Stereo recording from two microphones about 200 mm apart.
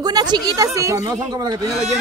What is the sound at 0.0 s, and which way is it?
Speech, 20° right (ahead or behind).